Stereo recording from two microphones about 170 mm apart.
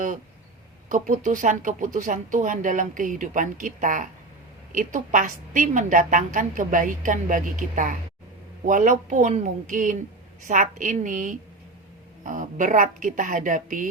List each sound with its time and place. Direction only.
0.9 s speech: 50° right (ahead or behind)